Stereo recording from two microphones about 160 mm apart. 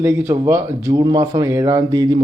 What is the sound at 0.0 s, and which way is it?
A man's voice, 15° right (ahead or behind).